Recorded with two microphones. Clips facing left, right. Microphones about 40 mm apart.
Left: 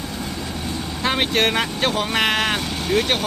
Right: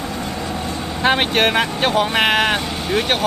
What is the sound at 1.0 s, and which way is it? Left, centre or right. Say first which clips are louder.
Speech: right 4 dB; right.